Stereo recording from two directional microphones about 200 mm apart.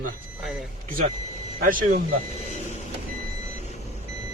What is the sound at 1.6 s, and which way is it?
Speech, 45° right (ahead or behind).